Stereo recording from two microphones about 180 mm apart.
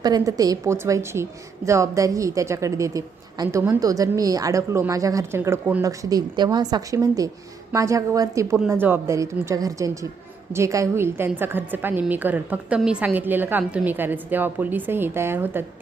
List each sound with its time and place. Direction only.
0.0 s a woman's voice: 20° right (ahead or behind)